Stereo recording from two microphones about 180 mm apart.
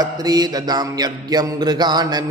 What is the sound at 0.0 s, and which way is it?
A man's voice, 20° right (ahead or behind).